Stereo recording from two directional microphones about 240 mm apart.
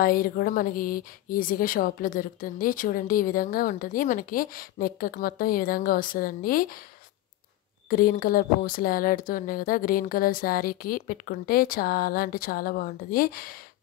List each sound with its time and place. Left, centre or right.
0.0 s speech: left
7.9 s speech: left